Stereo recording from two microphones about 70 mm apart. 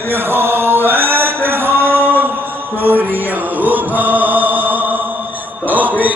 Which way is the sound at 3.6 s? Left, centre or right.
Right.